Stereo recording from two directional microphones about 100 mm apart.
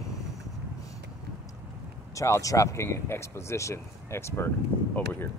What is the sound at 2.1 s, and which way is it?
Speech, 30° left (ahead or behind).